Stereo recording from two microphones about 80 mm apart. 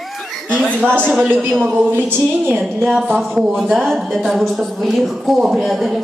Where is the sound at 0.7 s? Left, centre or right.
Right.